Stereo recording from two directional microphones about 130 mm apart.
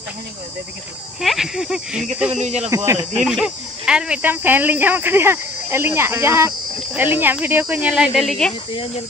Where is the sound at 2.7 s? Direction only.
20° right (ahead or behind).